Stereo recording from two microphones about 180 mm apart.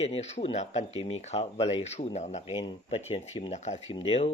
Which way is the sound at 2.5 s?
30° left (ahead or behind).